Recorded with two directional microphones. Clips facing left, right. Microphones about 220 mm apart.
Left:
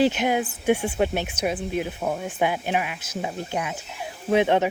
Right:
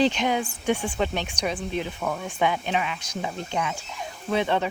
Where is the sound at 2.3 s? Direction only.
5° left (ahead or behind).